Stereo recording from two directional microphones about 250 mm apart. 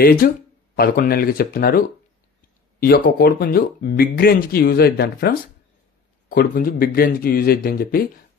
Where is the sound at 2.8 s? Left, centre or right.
Left.